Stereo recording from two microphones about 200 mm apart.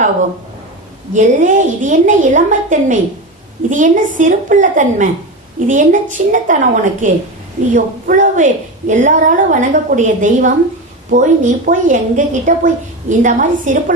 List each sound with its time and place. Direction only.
1.1 s a woman's voice: 35° right (ahead or behind)